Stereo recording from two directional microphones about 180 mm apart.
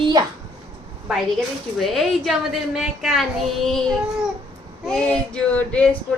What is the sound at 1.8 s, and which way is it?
Speech, centre (ahead or behind).